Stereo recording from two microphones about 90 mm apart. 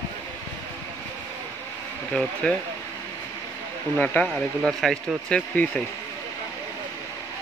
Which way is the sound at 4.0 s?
15° left (ahead or behind).